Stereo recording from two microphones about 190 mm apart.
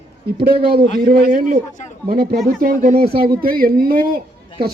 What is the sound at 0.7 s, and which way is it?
Speech, 50° right (ahead or behind).